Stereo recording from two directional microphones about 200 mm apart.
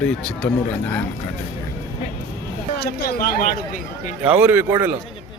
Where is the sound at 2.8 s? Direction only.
50° left (ahead or behind).